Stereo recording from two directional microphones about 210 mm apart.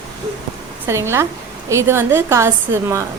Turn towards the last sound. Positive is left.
turn(degrees=-10)  # may be behind; listen again after turning